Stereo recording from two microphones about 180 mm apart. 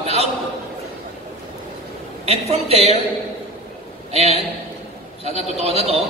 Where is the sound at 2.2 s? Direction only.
35° right (ahead or behind).